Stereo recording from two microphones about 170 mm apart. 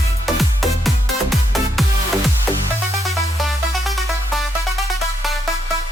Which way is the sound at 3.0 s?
Centre (ahead or behind).